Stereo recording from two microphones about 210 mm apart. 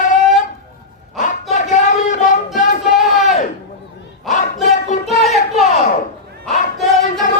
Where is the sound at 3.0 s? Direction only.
Centre (ahead or behind).